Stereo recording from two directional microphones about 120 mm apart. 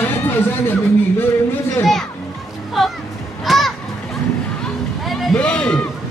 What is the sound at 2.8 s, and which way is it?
Speech, centre (ahead or behind).